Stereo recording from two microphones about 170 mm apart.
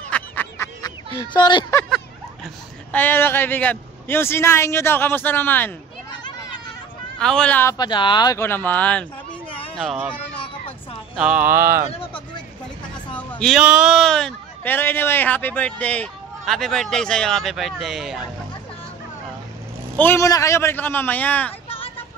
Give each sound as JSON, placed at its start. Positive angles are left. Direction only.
{"t": 0.1, "sound": "duck", "side_deg": 10}
{"t": 0.8, "sound": "speech", "side_deg": 25}
{"t": 2.4, "sound": "a man's voice", "side_deg": 10}
{"t": 7.2, "sound": "speech", "side_deg": 5}
{"t": 7.7, "sound": "speech", "side_deg": 25}
{"t": 9.8, "sound": "speech", "side_deg": -5}
{"t": 11.1, "sound": "speech", "side_deg": -5}
{"t": 11.9, "sound": "a sound", "side_deg": 35}
{"t": 13.4, "sound": "speech", "side_deg": 0}
{"t": 20.0, "sound": "a man's voice", "side_deg": 15}
{"t": 21.6, "sound": "a sound", "side_deg": 35}